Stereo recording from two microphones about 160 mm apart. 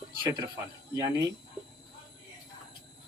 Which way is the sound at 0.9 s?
20° right (ahead or behind).